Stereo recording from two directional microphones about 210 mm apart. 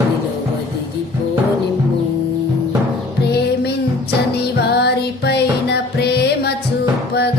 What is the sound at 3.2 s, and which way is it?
Music, 50° left (ahead or behind).